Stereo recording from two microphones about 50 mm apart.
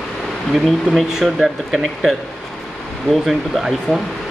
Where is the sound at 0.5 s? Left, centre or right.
Centre.